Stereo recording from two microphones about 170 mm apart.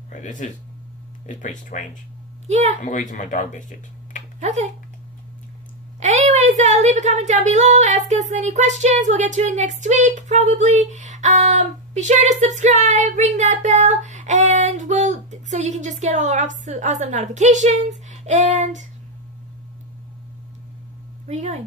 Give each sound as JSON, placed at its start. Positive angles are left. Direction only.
{"t": 0.1, "sound": "speech", "side_deg": 45}
{"t": 2.4, "sound": "a woman's voice", "side_deg": -40}
{"t": 2.8, "sound": "speech", "side_deg": 45}
{"t": 4.4, "sound": "speech", "side_deg": -40}
{"t": 5.9, "sound": "a woman's voice", "side_deg": -40}
{"t": 21.3, "sound": "a woman's voice", "side_deg": -40}